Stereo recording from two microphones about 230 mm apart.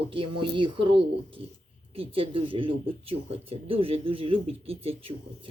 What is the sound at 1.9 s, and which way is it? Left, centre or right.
Speech, right.